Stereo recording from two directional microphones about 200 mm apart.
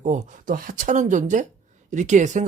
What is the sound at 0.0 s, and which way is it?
Speech, 35° right (ahead or behind).